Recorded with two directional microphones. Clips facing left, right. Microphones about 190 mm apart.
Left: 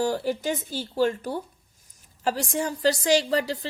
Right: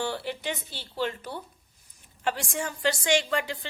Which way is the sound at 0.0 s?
40° left (ahead or behind).